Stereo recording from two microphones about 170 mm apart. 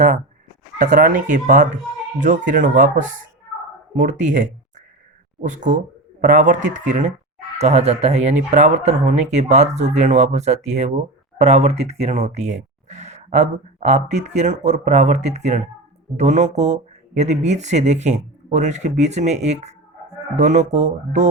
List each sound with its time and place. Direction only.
0.8 s speech: 55° right (ahead or behind)